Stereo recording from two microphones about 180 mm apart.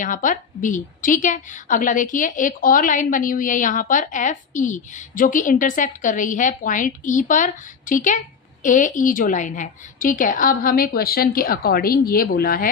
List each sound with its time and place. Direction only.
0.0 s a woman's voice: 45° left (ahead or behind)